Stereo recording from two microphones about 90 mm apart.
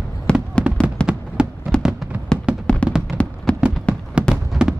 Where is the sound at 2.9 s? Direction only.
10° right (ahead or behind).